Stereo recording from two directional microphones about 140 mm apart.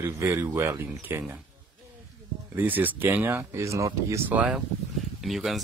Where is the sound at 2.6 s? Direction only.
15° right (ahead or behind).